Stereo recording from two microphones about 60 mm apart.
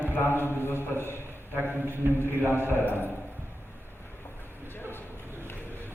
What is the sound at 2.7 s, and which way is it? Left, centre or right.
Speech, left.